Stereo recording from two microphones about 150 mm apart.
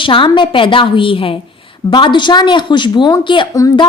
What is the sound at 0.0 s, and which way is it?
A woman's voice, 35° left (ahead or behind).